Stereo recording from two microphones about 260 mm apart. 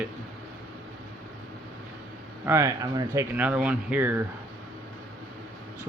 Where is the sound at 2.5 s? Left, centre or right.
Centre.